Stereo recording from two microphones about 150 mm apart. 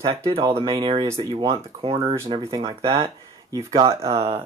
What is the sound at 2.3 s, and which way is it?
Speech, 35° right (ahead or behind).